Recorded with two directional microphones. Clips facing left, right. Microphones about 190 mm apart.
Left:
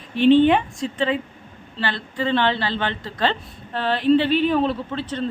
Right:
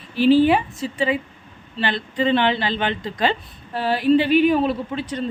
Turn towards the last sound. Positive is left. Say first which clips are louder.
# right 1 dB
turn(degrees=-10)  # may be behind; listen again after turning